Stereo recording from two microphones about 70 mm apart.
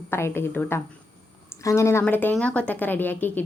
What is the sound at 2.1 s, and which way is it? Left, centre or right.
A woman's voice, left.